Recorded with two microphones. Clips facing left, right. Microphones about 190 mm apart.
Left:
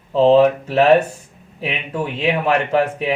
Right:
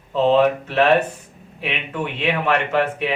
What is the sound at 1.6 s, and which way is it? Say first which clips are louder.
Speech: left 2 dB; 35° left (ahead or behind).